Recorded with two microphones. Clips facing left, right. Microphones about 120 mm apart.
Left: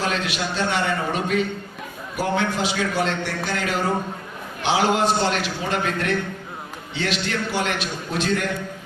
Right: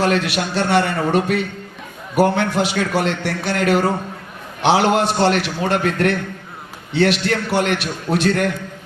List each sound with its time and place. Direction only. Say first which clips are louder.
0.0 s a man's voice: right 6 dB; 60° right (ahead or behind)